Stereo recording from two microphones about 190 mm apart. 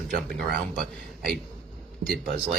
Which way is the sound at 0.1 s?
55° right (ahead or behind).